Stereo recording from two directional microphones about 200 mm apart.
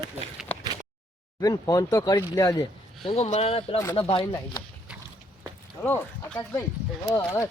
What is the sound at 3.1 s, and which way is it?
Speech, 35° left (ahead or behind).